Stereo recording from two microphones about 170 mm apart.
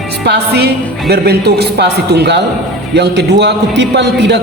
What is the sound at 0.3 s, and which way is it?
A man's voice, 75° right (ahead or behind).